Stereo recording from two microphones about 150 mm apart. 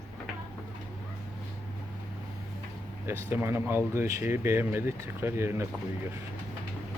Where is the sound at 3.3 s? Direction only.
15° right (ahead or behind).